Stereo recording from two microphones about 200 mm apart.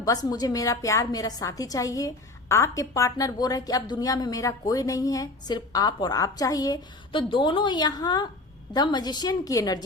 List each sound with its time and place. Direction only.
0.0 s a woman's voice: 20° left (ahead or behind)